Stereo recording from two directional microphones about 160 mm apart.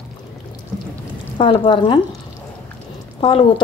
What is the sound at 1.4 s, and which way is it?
Speech, 30° left (ahead or behind).